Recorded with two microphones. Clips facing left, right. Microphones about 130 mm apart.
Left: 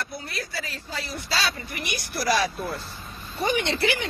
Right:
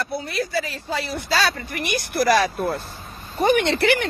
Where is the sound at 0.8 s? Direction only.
75° right (ahead or behind).